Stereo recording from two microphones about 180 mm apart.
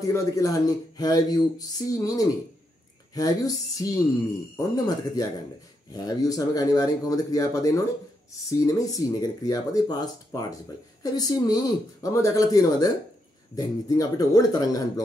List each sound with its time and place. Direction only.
0.0 s speech: 20° left (ahead or behind)